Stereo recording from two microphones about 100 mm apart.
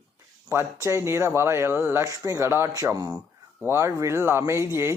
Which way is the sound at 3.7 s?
25° right (ahead or behind).